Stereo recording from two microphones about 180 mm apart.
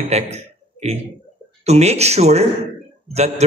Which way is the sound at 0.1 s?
35° right (ahead or behind).